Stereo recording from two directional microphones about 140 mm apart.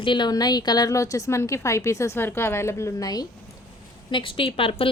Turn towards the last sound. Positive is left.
turn(degrees=40)  # may be behind; listen again after turning